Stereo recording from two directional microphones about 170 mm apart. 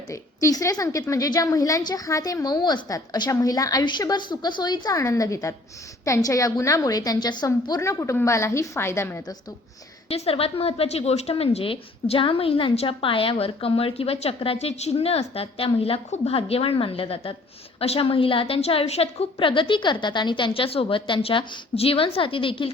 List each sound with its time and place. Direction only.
0.1 s a woman's voice: 20° left (ahead or behind)
10.1 s a woman's voice: 35° left (ahead or behind)